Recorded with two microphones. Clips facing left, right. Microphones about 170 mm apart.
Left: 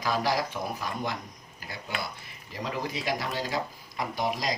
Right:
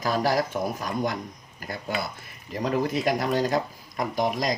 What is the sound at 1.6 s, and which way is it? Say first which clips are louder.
Cutlery: right 7 dB; 50° right (ahead or behind).